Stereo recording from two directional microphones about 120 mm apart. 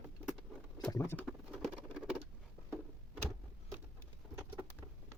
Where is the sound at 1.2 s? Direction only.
Centre (ahead or behind).